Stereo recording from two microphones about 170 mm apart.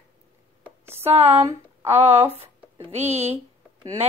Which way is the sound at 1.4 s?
20° right (ahead or behind).